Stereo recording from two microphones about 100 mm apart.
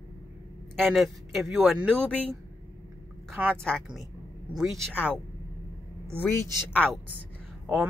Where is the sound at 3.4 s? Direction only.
15° right (ahead or behind).